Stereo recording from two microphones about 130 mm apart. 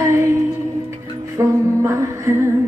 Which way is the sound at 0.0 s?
20° right (ahead or behind).